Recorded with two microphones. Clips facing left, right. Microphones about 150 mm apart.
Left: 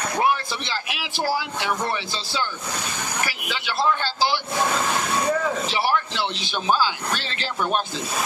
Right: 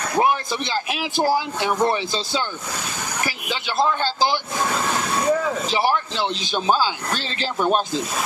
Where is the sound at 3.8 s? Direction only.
20° right (ahead or behind).